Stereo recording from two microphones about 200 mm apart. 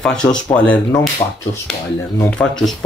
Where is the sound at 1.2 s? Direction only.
25° left (ahead or behind).